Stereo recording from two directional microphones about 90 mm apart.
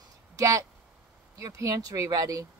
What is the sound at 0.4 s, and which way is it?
A woman's voice, 40° right (ahead or behind).